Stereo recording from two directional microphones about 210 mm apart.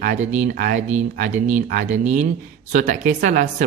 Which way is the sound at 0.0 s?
35° right (ahead or behind).